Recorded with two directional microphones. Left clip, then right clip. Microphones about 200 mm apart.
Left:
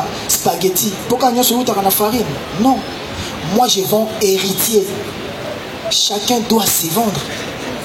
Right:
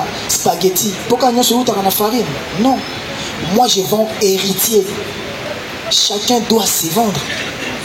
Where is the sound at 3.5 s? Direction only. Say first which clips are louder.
Right 1 dB; 40° right (ahead or behind).